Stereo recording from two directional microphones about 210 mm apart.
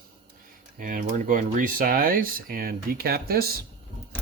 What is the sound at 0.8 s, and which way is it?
Speech, 40° right (ahead or behind).